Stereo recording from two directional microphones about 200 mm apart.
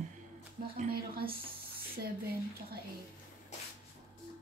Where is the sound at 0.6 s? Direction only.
50° right (ahead or behind).